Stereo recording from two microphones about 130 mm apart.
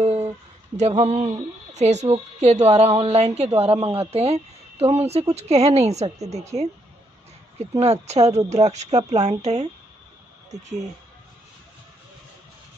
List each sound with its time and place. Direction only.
0.7 s a woman's voice: 60° right (ahead or behind)
7.8 s speech: 55° right (ahead or behind)